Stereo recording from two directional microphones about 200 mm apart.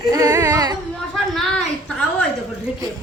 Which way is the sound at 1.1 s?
Centre (ahead or behind).